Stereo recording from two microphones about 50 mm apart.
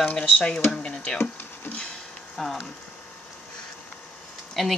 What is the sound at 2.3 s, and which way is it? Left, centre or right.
Speech, centre.